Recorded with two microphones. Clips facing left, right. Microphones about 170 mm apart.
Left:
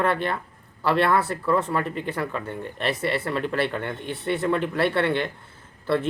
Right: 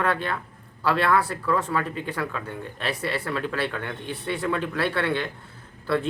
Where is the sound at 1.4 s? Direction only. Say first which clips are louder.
Left 2 dB; 20° left (ahead or behind).